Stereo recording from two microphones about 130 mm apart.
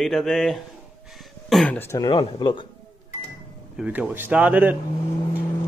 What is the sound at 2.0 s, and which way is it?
Speech, 40° left (ahead or behind).